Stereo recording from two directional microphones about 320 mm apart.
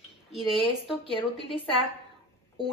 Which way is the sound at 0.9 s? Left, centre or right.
Centre.